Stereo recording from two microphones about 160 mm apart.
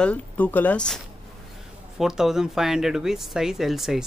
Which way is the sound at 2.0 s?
5° right (ahead or behind).